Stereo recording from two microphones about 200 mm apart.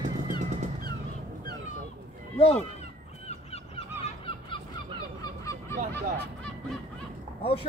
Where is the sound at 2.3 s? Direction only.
30° left (ahead or behind).